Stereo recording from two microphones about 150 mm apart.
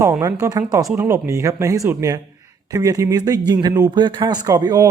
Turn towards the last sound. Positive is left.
turn(degrees=-25)  # may be behind; listen again after turning